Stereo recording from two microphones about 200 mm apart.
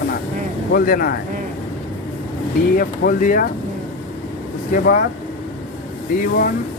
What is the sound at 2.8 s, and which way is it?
Speech, 45° left (ahead or behind).